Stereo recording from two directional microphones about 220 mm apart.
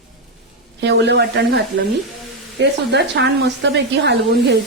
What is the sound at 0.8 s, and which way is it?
A woman's voice, 50° right (ahead or behind).